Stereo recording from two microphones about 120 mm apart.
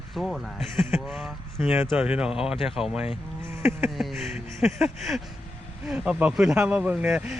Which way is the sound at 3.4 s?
20° right (ahead or behind).